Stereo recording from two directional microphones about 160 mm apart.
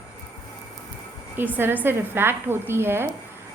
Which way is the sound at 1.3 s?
10° right (ahead or behind).